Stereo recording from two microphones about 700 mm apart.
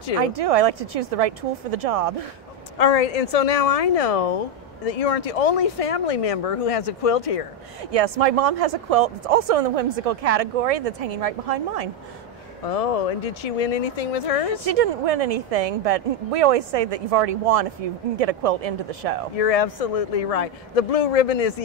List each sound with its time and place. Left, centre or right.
0.2 s speech: right
2.8 s speech: left
7.9 s speech: right
12.6 s speech: left
14.6 s speech: right
19.3 s speech: left